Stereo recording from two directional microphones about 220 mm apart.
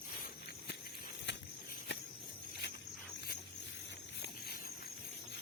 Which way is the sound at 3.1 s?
45° left (ahead or behind).